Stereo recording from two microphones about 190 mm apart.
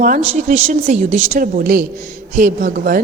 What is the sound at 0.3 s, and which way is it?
A woman's voice, 40° right (ahead or behind).